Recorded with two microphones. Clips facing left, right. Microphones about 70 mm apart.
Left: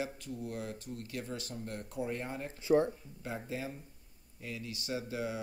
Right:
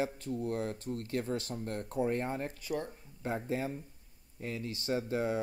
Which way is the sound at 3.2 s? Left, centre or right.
Right.